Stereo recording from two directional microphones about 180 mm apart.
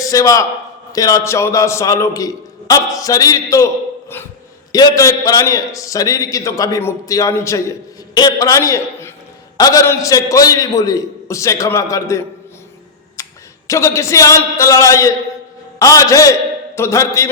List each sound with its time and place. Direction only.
0.0 s a man's voice: 20° left (ahead or behind)
4.7 s a man's voice: 20° left (ahead or behind)
13.2 s a sound: 15° left (ahead or behind)
13.7 s a man's voice: 15° left (ahead or behind)